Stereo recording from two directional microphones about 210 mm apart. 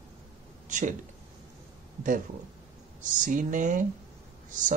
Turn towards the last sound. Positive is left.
turn(degrees=-35)  # may be behind; listen again after turning